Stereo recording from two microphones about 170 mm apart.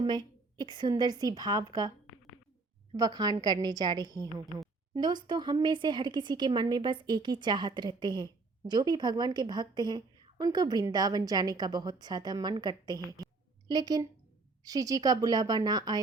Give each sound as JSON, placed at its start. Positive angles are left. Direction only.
{"t": 0.0, "sound": "a woman's voice", "side_deg": -25}
{"t": 2.9, "sound": "speech", "side_deg": -20}